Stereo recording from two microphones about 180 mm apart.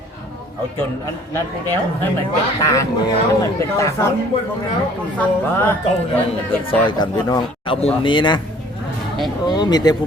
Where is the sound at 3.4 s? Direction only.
15° left (ahead or behind).